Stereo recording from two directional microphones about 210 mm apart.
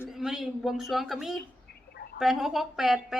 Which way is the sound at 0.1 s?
Centre (ahead or behind).